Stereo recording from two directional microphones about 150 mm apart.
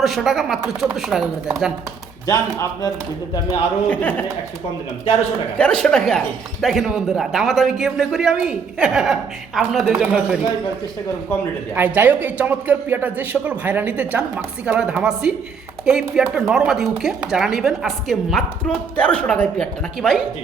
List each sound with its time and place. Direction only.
0.0 s speech: centre (ahead or behind)
2.2 s speech: 25° left (ahead or behind)
3.8 s speech: 10° left (ahead or behind)
5.5 s speech: 5° left (ahead or behind)
11.7 s speech: 10° right (ahead or behind)